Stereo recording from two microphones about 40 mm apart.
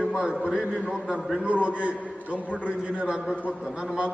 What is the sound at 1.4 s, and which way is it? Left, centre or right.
A man's voice, right.